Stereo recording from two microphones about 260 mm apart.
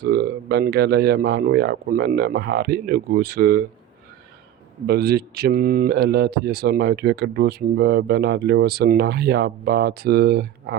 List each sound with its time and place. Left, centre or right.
0.0 s speech: right
4.9 s speech: right